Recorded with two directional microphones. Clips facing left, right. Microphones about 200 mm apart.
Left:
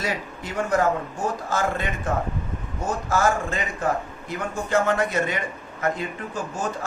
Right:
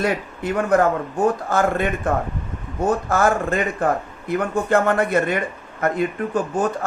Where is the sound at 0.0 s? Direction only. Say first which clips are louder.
Right 7 dB; 55° right (ahead or behind).